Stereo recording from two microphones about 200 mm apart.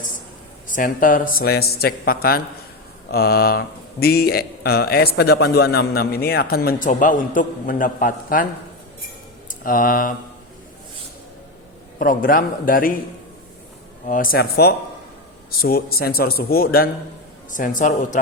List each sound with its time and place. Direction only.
0.7 s speech: 40° left (ahead or behind)
9.5 s speech: 45° left (ahead or behind)
11.9 s speech: 45° left (ahead or behind)
14.1 s a man's voice: 45° left (ahead or behind)